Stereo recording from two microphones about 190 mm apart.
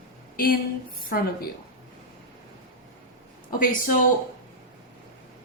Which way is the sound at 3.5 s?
45° left (ahead or behind).